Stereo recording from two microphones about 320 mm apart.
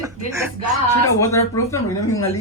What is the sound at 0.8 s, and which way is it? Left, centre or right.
Speech, centre.